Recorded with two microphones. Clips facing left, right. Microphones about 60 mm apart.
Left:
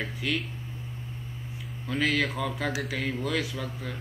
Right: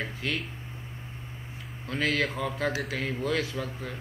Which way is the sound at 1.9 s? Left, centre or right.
Centre.